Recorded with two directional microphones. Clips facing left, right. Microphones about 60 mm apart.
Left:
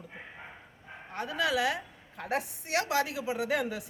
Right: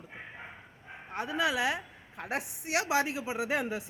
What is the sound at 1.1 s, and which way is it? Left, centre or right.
Speech, right.